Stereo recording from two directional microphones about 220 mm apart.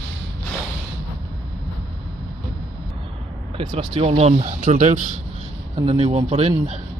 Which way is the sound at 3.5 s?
25° right (ahead or behind).